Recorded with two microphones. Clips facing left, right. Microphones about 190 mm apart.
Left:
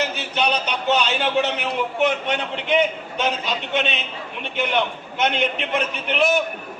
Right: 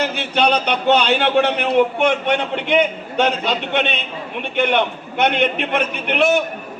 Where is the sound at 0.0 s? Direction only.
60° right (ahead or behind).